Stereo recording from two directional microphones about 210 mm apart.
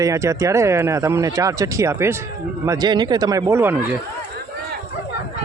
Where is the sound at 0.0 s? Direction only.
15° right (ahead or behind).